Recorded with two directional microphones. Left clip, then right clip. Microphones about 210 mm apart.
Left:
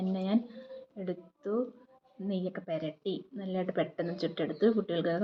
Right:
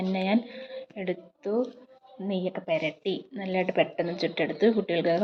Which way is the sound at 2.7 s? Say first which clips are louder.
Right 8 dB; 20° right (ahead or behind).